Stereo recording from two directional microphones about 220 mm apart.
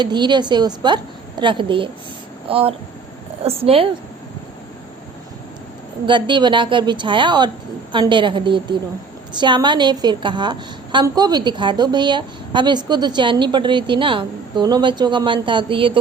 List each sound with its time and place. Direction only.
0.0 s a woman's voice: 20° right (ahead or behind)
6.1 s a woman's voice: 20° right (ahead or behind)